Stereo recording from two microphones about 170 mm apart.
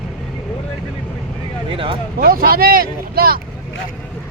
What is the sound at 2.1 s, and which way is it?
Speech, 60° right (ahead or behind).